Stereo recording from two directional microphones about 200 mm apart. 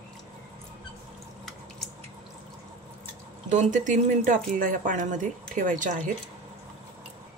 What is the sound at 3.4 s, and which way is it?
Speech, 40° right (ahead or behind).